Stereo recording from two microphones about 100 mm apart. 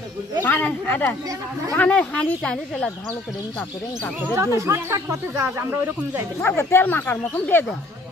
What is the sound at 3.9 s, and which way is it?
Speech, 20° left (ahead or behind).